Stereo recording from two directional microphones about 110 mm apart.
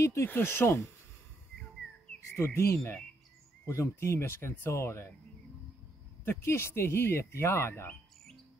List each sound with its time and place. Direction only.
0.0 s speech: 25° left (ahead or behind)
2.3 s speech: 25° left (ahead or behind)
6.2 s speech: 25° left (ahead or behind)